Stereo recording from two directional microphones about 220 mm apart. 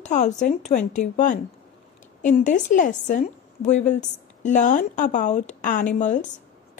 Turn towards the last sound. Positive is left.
turn(degrees=35)  # may be behind; listen again after turning